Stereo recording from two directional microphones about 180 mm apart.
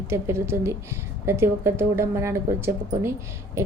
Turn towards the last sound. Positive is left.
turn(degrees=-15)  # may be behind; listen again after turning